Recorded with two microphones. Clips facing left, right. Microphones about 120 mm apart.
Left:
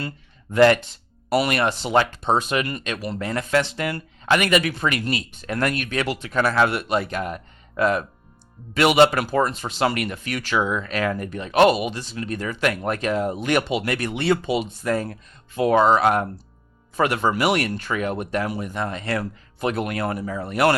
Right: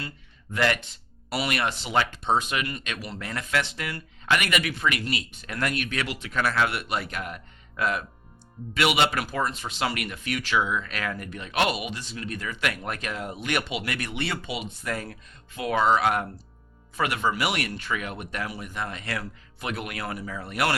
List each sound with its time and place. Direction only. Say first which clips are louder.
0.5 s speech: left 10 dB; 40° left (ahead or behind)